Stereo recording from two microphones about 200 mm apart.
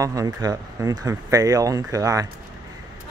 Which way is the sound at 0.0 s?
15° right (ahead or behind).